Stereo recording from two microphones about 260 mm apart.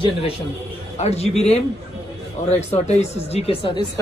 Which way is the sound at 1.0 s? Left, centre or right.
Left.